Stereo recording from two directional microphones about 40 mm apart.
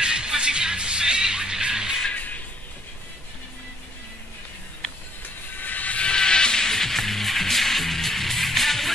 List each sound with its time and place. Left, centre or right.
0.0 s music: right
2.1 s music: left
5.6 s music: left
5.9 s music: left; by 8.9 s centre